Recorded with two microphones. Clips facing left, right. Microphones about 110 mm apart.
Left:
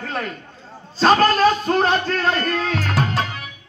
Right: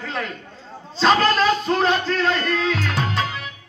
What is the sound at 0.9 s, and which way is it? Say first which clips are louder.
Music: left 2 dB; 45° left (ahead or behind).